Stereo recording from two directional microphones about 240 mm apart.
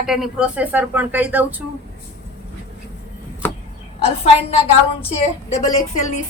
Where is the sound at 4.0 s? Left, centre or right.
Left.